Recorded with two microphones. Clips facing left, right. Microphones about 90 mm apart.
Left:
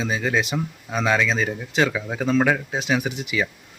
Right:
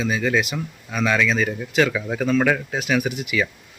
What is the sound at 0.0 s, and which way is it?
Speech, 30° left (ahead or behind).